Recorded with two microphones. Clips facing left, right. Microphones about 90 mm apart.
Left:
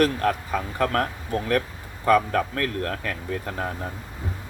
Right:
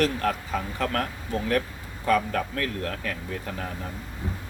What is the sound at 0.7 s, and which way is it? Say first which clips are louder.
Speech: left 6 dB; 45° left (ahead or behind).